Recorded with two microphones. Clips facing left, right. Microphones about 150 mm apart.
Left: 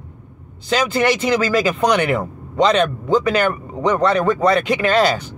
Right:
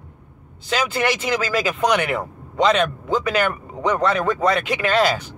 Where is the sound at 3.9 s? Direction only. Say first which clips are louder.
Left 4 dB; 30° left (ahead or behind).